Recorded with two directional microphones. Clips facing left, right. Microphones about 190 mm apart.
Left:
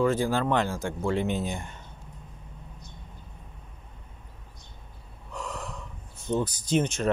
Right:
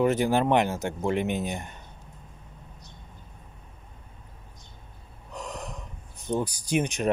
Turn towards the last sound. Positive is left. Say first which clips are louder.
# even
turn(degrees=-15)  # may be behind; listen again after turning